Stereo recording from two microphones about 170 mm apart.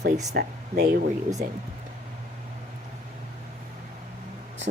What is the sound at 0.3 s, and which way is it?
Speech, 65° right (ahead or behind).